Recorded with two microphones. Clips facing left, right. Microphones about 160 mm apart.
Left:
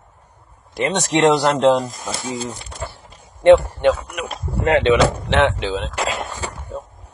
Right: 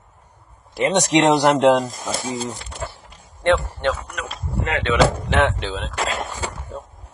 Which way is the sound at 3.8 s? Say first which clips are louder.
Left 6 dB; 15° left (ahead or behind).